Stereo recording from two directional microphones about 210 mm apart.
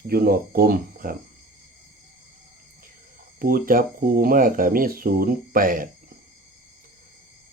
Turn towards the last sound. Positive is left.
turn(degrees=-40)  # may be behind; listen again after turning